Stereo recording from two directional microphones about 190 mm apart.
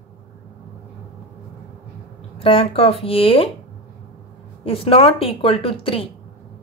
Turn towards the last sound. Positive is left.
turn(degrees=30)  # may be behind; listen again after turning